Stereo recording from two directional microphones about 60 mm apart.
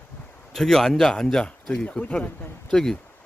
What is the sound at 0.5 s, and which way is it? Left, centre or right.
Speech, centre.